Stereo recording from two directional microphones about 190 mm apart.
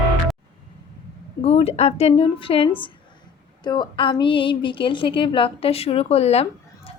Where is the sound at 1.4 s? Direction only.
30° left (ahead or behind).